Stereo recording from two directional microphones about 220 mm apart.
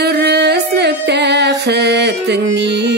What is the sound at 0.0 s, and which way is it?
Music, 50° right (ahead or behind).